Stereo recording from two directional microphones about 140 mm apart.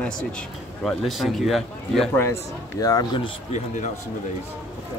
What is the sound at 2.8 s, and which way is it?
Speech, 25° left (ahead or behind).